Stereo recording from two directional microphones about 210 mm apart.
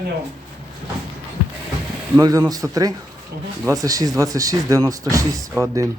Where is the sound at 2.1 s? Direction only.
15° right (ahead or behind).